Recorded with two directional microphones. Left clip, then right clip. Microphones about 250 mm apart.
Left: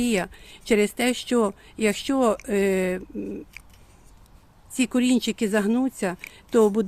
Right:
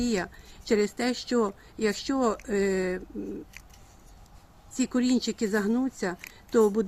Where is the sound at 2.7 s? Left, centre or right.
Left.